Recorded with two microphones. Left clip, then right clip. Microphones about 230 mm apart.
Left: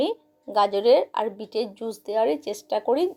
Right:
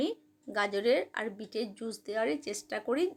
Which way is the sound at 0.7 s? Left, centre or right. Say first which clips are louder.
Left 8 dB; right.